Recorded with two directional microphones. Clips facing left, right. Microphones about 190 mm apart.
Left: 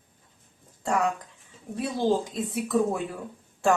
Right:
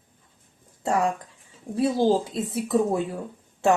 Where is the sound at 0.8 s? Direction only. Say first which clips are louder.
Right 2 dB; 30° right (ahead or behind).